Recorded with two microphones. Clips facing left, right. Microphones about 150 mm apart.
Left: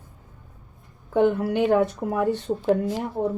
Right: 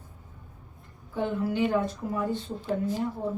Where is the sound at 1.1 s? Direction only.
70° left (ahead or behind).